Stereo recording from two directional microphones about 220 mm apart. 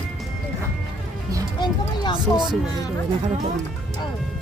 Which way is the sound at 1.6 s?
20° left (ahead or behind).